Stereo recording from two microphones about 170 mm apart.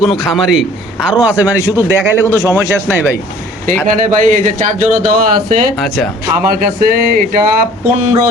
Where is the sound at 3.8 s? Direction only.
50° right (ahead or behind).